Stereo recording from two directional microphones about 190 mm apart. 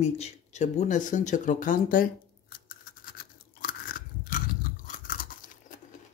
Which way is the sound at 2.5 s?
50° left (ahead or behind).